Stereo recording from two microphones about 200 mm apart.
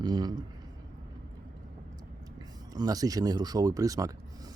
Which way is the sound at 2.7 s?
20° right (ahead or behind).